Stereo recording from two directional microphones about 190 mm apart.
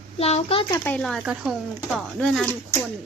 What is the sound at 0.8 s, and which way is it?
Speech, 5° left (ahead or behind).